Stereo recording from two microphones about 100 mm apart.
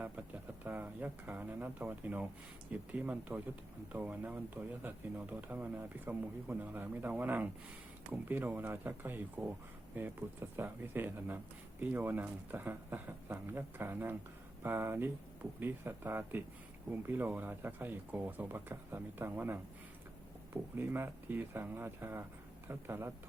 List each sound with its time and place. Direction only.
0.0 s speech: 20° right (ahead or behind)